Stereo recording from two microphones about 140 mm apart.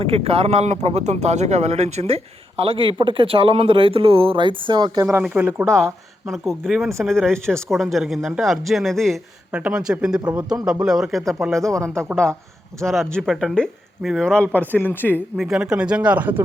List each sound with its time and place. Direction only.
0.0 s speech: 40° right (ahead or behind)
5.2 s speech: 10° right (ahead or behind)
6.2 s speech: centre (ahead or behind)
12.8 s speech: centre (ahead or behind)
15.4 s speech: 5° right (ahead or behind)